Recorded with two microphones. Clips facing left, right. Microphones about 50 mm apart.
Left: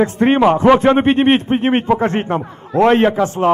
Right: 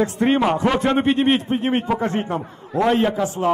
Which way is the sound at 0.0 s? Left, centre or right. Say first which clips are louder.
Left 6 dB; left.